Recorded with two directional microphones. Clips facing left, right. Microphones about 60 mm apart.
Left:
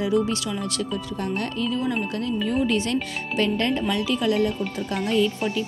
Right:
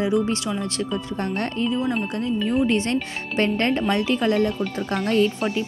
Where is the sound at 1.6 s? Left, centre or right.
Right.